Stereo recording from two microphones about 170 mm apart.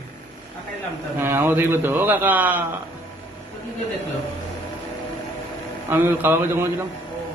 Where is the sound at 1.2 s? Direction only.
15° right (ahead or behind).